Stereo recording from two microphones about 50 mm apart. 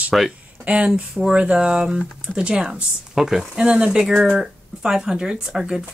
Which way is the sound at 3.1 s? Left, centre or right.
Centre.